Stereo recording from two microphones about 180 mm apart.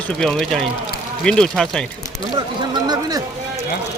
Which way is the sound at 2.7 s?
20° right (ahead or behind).